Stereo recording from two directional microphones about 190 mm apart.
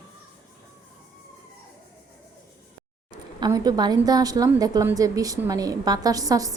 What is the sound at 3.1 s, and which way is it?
A woman's voice, 20° right (ahead or behind).